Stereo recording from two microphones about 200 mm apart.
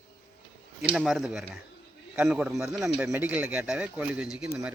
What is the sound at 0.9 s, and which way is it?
Speech, centre (ahead or behind).